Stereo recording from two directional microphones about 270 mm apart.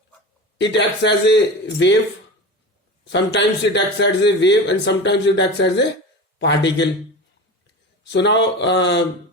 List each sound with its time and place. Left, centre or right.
0.6 s a man's voice: left
3.0 s a man's voice: left
8.1 s a man's voice: left